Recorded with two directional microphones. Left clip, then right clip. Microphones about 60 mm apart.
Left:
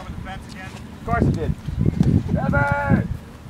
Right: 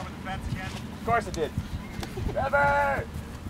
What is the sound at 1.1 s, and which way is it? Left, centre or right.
Speech, right.